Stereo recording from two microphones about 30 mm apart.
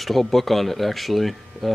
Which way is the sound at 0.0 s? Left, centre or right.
Centre.